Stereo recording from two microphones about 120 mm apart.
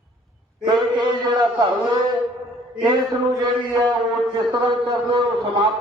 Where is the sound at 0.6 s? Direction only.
40° right (ahead or behind).